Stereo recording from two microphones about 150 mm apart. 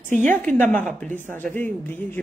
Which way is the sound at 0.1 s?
55° right (ahead or behind).